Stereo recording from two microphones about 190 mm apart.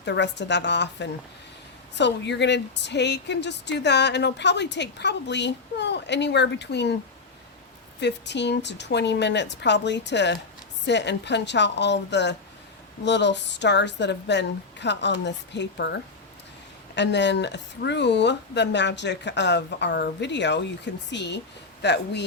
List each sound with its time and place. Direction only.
0.0 s speech: 65° left (ahead or behind)
8.0 s speech: 65° left (ahead or behind)